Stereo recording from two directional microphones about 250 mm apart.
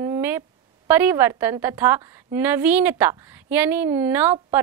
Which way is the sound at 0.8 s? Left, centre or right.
Centre.